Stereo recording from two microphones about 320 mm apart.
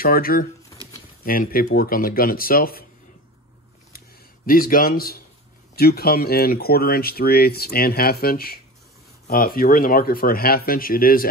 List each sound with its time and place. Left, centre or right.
0.0 s speech: left
4.5 s speech: left